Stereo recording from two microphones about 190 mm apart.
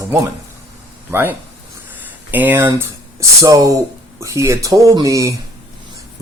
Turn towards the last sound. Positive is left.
turn(degrees=-15)  # may be behind; listen again after turning